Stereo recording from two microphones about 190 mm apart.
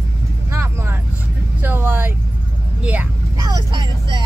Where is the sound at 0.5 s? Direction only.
15° right (ahead or behind).